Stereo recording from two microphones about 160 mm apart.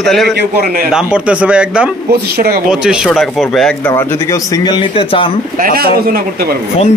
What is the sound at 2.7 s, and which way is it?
Speech, 5° right (ahead or behind).